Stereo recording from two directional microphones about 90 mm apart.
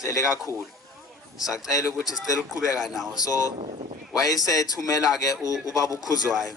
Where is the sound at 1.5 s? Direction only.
40° left (ahead or behind).